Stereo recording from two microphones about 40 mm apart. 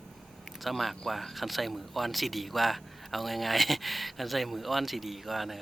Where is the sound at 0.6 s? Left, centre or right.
Centre.